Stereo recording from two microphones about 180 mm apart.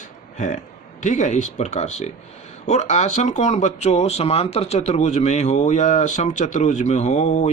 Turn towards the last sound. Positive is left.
turn(degrees=40)  # may be behind; listen again after turning